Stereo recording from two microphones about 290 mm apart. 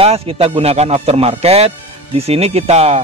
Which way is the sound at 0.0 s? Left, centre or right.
Centre.